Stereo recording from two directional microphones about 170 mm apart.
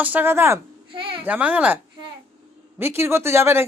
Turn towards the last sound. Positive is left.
turn(degrees=-15)  # may be behind; listen again after turning